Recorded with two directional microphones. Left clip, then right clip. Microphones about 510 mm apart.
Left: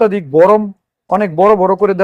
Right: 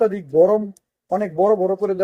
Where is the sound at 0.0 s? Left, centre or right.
Left.